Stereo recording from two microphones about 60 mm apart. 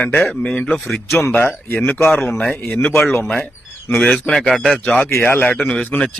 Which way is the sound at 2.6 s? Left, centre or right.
Left.